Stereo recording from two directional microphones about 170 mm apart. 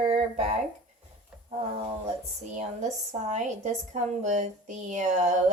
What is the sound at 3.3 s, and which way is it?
A woman's voice, 45° right (ahead or behind).